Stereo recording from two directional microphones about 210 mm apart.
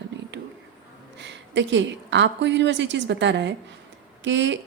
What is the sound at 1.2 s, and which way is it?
A woman's voice, 55° right (ahead or behind).